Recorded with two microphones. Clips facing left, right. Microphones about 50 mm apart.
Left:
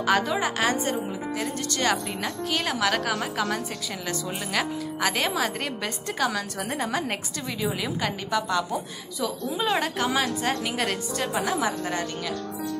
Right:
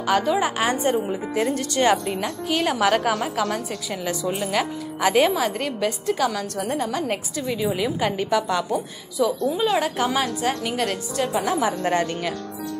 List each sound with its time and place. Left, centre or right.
0.0 s a woman's voice: centre
0.4 s a woman's voice: centre
0.7 s a woman's voice: right; by 3.5 s centre
4.6 s a woman's voice: centre
8.0 s a woman's voice: centre
9.2 s a woman's voice: centre
11.8 s speech: right